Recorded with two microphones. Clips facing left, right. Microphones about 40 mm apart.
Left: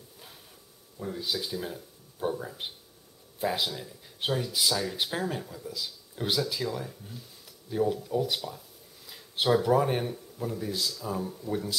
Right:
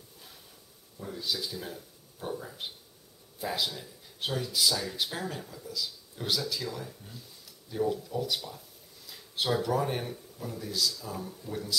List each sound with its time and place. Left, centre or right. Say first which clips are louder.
0.9 s speech: left 2 dB; centre
9.0 s a sound: left 2 dB; centre
9.5 s speech: left 5 dB; centre